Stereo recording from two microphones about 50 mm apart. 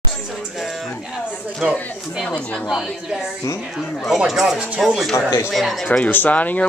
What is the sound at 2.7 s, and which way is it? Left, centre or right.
Speech, centre.